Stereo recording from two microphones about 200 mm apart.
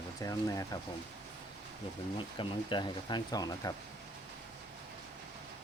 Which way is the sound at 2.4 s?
25° left (ahead or behind).